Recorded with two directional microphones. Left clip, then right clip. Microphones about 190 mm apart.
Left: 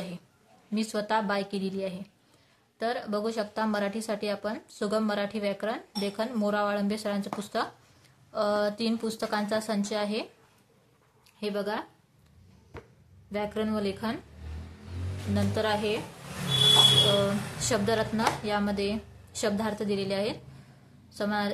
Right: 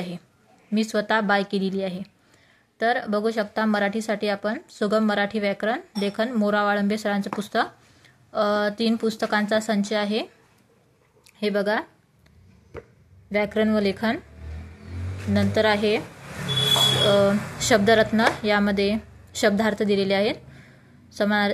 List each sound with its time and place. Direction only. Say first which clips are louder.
0.7 s speech: right 6 dB; 20° right (ahead or behind)
11.3 s speech: right 8 dB; 30° right (ahead or behind)
13.3 s speech: right 9 dB; 25° right (ahead or behind)
15.3 s speech: right 7 dB; 30° right (ahead or behind)
17.0 s speech: right 6 dB; 25° right (ahead or behind)